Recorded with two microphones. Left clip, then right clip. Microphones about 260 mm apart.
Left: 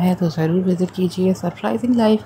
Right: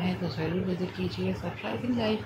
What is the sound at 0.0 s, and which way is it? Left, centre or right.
Speech, left.